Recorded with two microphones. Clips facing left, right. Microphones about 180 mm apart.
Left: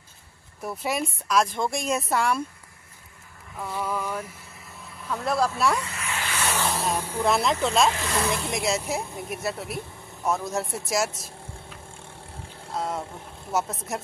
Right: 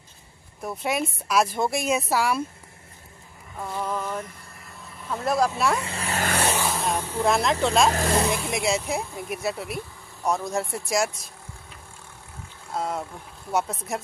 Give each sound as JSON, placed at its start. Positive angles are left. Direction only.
{"t": 0.6, "sound": "speech", "side_deg": 0}
{"t": 3.5, "sound": "a sound", "side_deg": 0}
{"t": 5.3, "sound": "speech", "side_deg": -20}
{"t": 5.8, "sound": "vehicle", "side_deg": -30}
{"t": 6.5, "sound": "vehicle", "side_deg": 0}
{"t": 7.2, "sound": "speech", "side_deg": 0}
{"t": 7.9, "sound": "speech", "side_deg": -45}
{"t": 8.3, "sound": "speech", "side_deg": -5}
{"t": 10.9, "sound": "vehicle", "side_deg": 5}
{"t": 12.7, "sound": "speech", "side_deg": 0}